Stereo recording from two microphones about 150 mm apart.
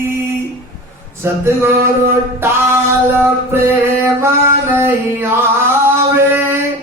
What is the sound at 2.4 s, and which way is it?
Singing, 15° right (ahead or behind).